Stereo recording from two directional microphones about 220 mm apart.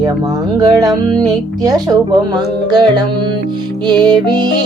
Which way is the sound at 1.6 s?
20° right (ahead or behind).